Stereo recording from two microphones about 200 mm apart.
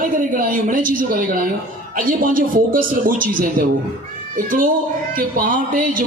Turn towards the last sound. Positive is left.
turn(degrees=-45)  # may be behind; listen again after turning